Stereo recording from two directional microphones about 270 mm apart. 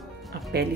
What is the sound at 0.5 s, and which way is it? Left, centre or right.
Speech, right.